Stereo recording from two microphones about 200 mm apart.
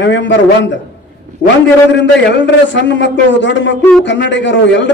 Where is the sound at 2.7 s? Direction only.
60° left (ahead or behind).